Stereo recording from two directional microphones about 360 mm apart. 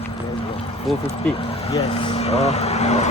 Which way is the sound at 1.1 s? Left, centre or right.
Centre.